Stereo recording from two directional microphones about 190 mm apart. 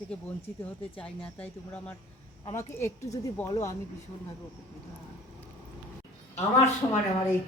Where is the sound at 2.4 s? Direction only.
15° left (ahead or behind).